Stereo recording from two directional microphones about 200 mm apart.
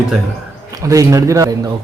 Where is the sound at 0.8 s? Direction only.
15° right (ahead or behind).